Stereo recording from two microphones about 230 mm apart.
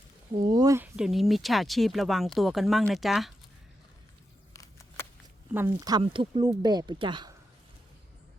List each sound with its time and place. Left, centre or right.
0.4 s speech: centre
0.9 s speech: centre
4.5 s a sound: centre
5.5 s speech: centre